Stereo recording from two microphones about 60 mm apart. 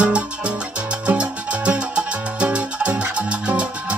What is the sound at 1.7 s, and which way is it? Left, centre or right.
Music, centre.